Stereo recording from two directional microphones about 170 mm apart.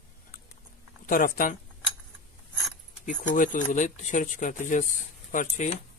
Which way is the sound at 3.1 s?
50° left (ahead or behind).